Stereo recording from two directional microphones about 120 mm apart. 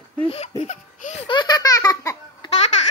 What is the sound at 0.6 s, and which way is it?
Laughter, 75° left (ahead or behind).